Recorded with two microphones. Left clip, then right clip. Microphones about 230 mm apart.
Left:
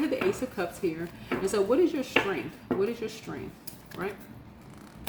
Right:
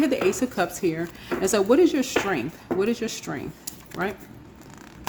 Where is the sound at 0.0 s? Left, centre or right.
Right.